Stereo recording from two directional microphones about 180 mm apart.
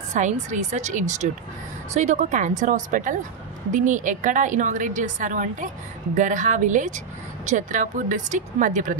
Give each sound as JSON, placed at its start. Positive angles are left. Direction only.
{"t": 0.1, "sound": "a woman's voice", "side_deg": -40}